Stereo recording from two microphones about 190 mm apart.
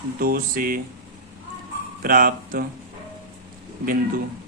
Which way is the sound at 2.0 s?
50° right (ahead or behind).